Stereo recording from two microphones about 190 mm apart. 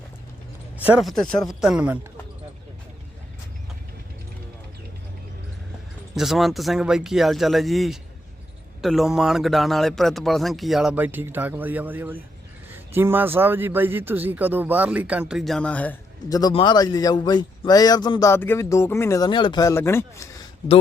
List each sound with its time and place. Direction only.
0.9 s a man's voice: centre (ahead or behind)
6.1 s a man's voice: centre (ahead or behind)
16.3 s a man's voice: 25° left (ahead or behind)